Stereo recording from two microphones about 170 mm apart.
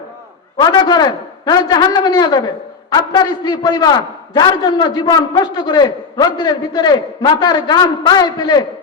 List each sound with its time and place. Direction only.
0.5 s a man's voice: 25° left (ahead or behind)